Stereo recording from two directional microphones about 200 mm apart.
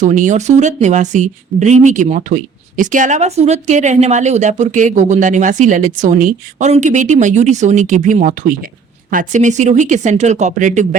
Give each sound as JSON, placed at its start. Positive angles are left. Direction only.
{"t": 0.0, "sound": "speech", "side_deg": -40}